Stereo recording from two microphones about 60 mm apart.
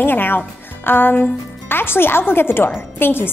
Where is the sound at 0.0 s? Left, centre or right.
Left.